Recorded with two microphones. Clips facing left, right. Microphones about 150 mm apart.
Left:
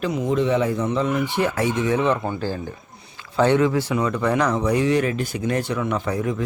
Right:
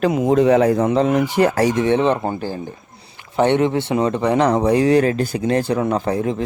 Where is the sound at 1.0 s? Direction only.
40° right (ahead or behind).